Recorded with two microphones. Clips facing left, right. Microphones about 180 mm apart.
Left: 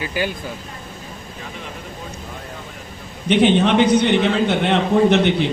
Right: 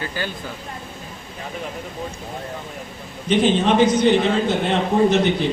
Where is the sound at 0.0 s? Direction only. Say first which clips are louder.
Left 4 dB; 15° left (ahead or behind).